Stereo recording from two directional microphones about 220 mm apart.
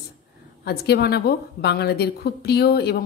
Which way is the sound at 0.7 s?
50° left (ahead or behind).